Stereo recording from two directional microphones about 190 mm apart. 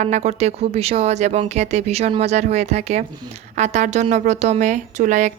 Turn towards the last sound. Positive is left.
turn(degrees=-40)  # may be behind; listen again after turning